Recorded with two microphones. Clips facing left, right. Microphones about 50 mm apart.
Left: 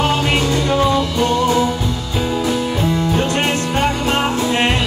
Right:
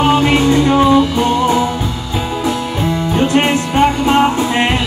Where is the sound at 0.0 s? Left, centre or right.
Centre.